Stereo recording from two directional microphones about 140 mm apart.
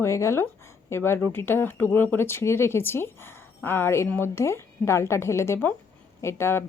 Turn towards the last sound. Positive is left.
turn(degrees=20)  # may be behind; listen again after turning